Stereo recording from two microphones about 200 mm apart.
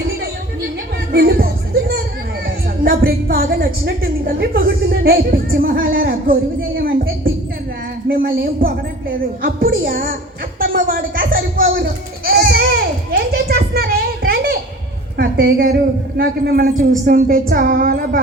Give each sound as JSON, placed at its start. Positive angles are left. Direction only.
{"t": 1.1, "sound": "music", "side_deg": -50}
{"t": 2.8, "sound": "a woman's voice", "side_deg": -50}
{"t": 6.0, "sound": "music", "side_deg": -45}
{"t": 8.0, "sound": "a woman's voice", "side_deg": -45}
{"t": 10.6, "sound": "goat", "side_deg": -45}
{"t": 15.2, "sound": "a woman's voice", "side_deg": -50}